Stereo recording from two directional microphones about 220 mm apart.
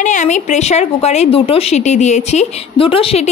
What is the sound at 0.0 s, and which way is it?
Speech, 35° left (ahead or behind).